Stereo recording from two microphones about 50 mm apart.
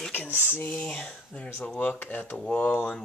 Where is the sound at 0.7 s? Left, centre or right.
Left.